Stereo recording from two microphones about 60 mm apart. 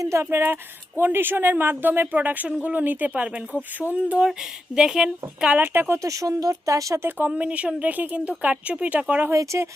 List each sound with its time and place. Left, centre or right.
0.0 s speech: right
4.3 s speech: centre
5.5 s speech: right
5.9 s speech: right
7.3 s speech: right
9.3 s speech: right